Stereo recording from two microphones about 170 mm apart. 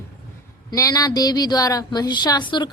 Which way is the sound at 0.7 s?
20° left (ahead or behind).